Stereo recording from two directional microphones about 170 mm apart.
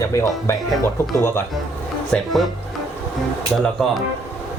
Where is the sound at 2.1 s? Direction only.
Centre (ahead or behind).